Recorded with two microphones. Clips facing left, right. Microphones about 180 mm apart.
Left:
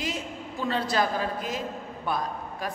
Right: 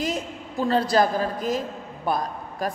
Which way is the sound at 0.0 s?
40° right (ahead or behind).